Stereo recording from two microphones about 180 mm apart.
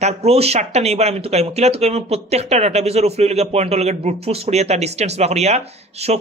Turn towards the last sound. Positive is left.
turn(degrees=-35)  # may be behind; listen again after turning